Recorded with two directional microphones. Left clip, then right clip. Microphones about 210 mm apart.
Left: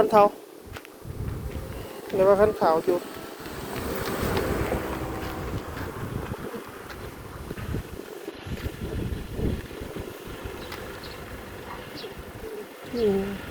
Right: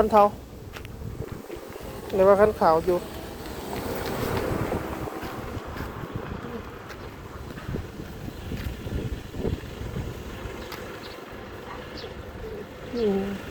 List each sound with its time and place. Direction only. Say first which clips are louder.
0.0 s speech: even; centre (ahead or behind)
2.0 s speech: right 1 dB; 5° right (ahead or behind)
3.7 s vehicle: even; 20° left (ahead or behind)
4.0 s boat: left 2 dB; 40° left (ahead or behind)
12.9 s speech: left 1 dB; 45° right (ahead or behind)